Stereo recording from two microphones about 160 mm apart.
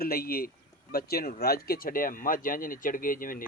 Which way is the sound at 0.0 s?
70° left (ahead or behind).